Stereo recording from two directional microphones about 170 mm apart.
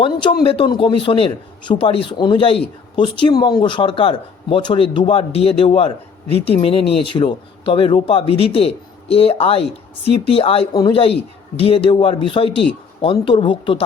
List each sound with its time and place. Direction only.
0.0 s speech: 30° left (ahead or behind)